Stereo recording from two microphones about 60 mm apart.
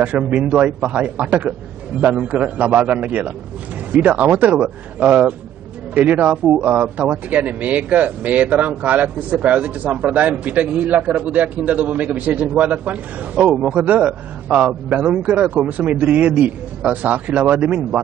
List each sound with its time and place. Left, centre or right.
0.0 s speech: right